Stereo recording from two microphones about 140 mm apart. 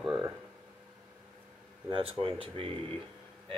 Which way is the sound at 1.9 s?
40° right (ahead or behind).